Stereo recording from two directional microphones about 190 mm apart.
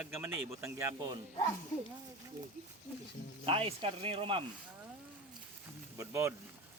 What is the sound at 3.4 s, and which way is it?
Speech, 30° right (ahead or behind).